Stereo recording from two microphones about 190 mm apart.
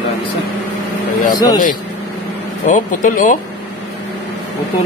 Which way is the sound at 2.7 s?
45° left (ahead or behind).